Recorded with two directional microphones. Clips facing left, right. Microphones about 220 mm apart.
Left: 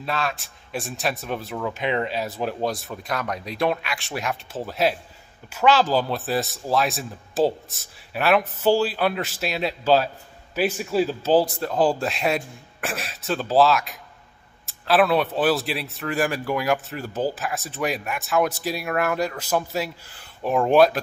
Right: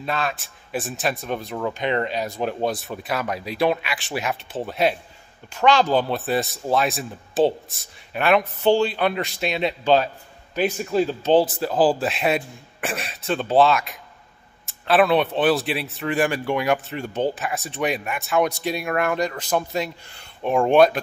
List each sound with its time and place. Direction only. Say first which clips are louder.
0.0 s speech: right 1 dB; centre (ahead or behind)